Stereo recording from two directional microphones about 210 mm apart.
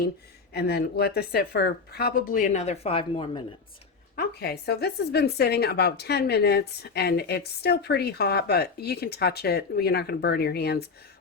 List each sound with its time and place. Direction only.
0.5 s speech: 50° left (ahead or behind); by 3.4 s 25° left (ahead or behind)
4.1 s speech: 50° left (ahead or behind)